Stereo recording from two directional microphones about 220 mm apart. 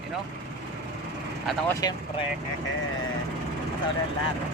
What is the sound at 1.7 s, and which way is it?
Speech, 15° left (ahead or behind).